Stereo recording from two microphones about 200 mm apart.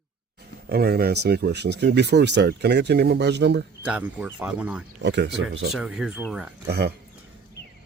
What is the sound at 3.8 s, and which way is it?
Speech, 5° right (ahead or behind).